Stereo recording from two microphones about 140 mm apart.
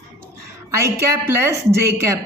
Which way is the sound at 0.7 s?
20° right (ahead or behind).